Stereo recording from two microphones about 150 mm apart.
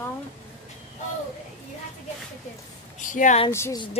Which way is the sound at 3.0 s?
60° left (ahead or behind).